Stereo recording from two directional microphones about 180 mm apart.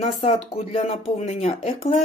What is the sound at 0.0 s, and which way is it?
Speech, 40° left (ahead or behind).